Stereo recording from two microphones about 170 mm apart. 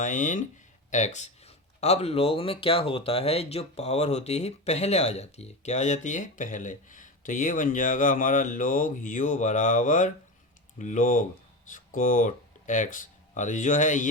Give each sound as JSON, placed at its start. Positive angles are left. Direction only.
{"t": 0.0, "sound": "speech", "side_deg": 50}